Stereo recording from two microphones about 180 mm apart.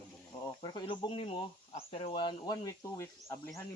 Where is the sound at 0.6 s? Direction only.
25° left (ahead or behind).